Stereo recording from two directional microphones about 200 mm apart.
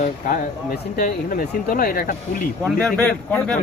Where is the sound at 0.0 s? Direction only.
45° left (ahead or behind).